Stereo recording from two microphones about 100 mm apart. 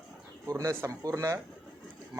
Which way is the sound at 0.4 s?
30° right (ahead or behind).